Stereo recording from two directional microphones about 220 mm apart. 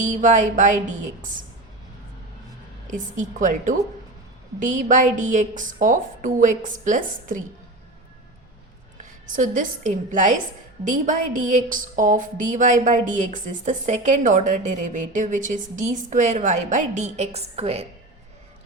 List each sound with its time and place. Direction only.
0.1 s a woman's voice: 35° right (ahead or behind)
2.9 s a woman's voice: 35° right (ahead or behind)
9.0 s a woman's voice: 35° right (ahead or behind)